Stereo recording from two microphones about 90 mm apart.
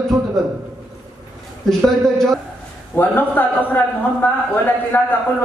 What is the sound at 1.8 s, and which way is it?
Speech, 5° left (ahead or behind).